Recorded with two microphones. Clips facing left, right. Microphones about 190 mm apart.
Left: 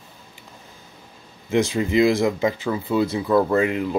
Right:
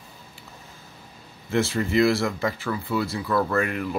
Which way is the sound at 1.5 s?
15° left (ahead or behind).